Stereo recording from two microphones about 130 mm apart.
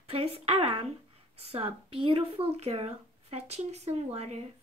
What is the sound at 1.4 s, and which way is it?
Speech, 50° right (ahead or behind).